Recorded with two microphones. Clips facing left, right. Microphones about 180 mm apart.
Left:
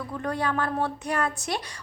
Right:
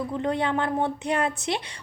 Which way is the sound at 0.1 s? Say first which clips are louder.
Right 1 dB; 20° right (ahead or behind).